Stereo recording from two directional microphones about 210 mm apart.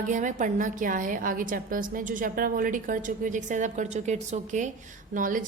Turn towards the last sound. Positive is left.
turn(degrees=-40)  # may be behind; listen again after turning